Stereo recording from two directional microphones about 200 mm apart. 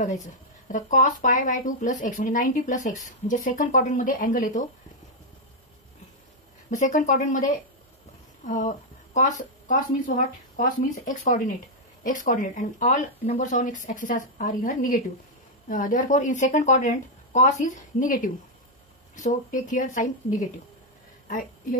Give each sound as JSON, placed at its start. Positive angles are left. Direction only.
{"t": 0.0, "sound": "speech", "side_deg": 40}
{"t": 6.8, "sound": "a woman's voice", "side_deg": 40}